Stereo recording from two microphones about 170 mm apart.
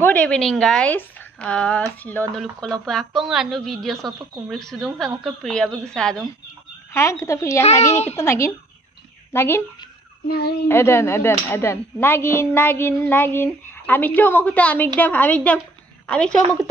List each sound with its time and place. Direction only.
0.0 s a woman's voice: 10° left (ahead or behind)
6.9 s speech: 15° left (ahead or behind)
7.9 s a child's voice: 40° left (ahead or behind)
8.2 s speech: 15° left (ahead or behind)
10.2 s a child's voice: 65° left (ahead or behind)
10.7 s a woman's voice: 15° left (ahead or behind)